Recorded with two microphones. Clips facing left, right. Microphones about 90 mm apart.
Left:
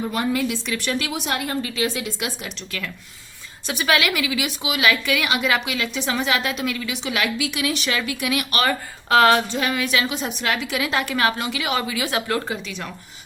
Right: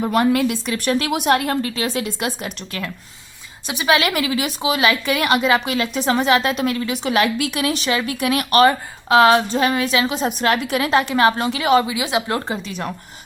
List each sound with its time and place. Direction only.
0.0 s a woman's voice: 60° right (ahead or behind)
1.7 s a woman's voice: 40° right (ahead or behind)
3.7 s a woman's voice: 20° right (ahead or behind)
4.1 s a woman's voice: 40° right (ahead or behind)
5.4 s a woman's voice: 30° right (ahead or behind)
5.6 s a woman's voice: 40° right (ahead or behind)
8.6 s a woman's voice: 20° right (ahead or behind)
9.5 s a woman's voice: 35° right (ahead or behind)
10.9 s a woman's voice: 25° right (ahead or behind)
11.9 s a woman's voice: 20° right (ahead or behind)